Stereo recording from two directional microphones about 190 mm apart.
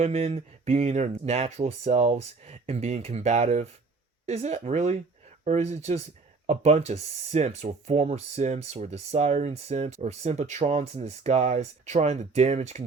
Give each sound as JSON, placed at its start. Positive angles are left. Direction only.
{"t": 0.0, "sound": "speech", "side_deg": -35}